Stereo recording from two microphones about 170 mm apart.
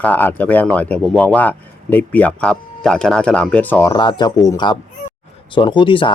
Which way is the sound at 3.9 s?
25° left (ahead or behind).